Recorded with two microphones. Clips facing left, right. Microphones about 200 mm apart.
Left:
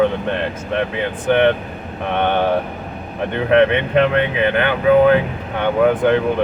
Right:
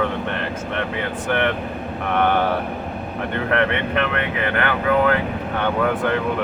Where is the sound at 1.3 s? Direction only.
25° left (ahead or behind).